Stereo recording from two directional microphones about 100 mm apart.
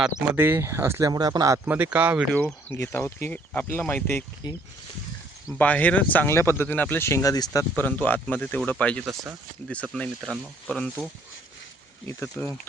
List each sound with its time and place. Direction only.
0.3 s speech: 20° right (ahead or behind)
1.1 s speech: 40° right (ahead or behind)
1.5 s speech: 20° right (ahead or behind)
2.3 s speech: 20° left (ahead or behind)
4.4 s speech: 45° left (ahead or behind)
5.5 s speech: 15° left (ahead or behind); by 7.6 s 40° left (ahead or behind)
7.8 s speech: 15° left (ahead or behind)
12.0 s speech: 20° left (ahead or behind)